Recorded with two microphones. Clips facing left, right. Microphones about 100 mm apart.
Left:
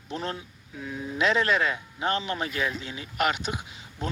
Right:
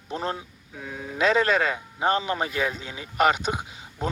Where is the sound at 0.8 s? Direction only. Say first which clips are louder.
Left 1 dB; 90° right.